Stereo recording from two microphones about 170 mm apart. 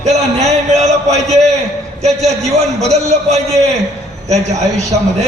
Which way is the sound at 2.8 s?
40° right (ahead or behind).